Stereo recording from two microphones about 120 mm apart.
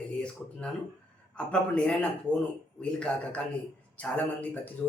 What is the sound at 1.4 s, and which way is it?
Speech, 10° left (ahead or behind).